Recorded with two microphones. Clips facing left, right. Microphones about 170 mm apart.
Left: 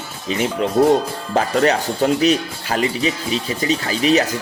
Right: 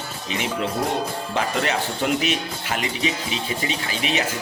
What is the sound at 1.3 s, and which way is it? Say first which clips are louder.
Speech: left 8 dB; 40° left (ahead or behind).